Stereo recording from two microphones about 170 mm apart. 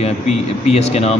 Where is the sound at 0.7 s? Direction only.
40° left (ahead or behind).